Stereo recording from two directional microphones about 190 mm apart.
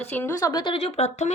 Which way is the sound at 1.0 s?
35° left (ahead or behind).